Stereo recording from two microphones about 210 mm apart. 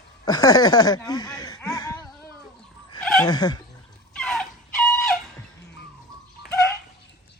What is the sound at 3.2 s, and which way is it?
Speech, 20° left (ahead or behind).